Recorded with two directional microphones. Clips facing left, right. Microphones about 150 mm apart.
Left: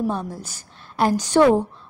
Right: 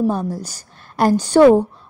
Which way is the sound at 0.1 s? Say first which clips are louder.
Right 5 dB; 40° right (ahead or behind).